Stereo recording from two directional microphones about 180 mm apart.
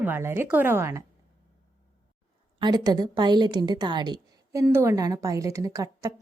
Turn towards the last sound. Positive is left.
turn(degrees=-20)  # may be behind; listen again after turning